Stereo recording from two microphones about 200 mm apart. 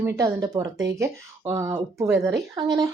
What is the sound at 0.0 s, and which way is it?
A woman's voice, 15° right (ahead or behind).